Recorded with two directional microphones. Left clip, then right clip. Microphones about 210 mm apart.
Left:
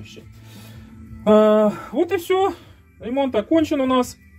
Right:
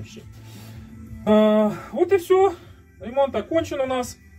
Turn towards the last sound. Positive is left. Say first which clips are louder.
# left 5 dB
turn(degrees=50)  # may be behind; listen again after turning